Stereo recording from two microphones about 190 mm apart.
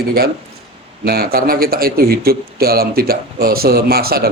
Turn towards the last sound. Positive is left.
turn(degrees=-55)  # may be behind; listen again after turning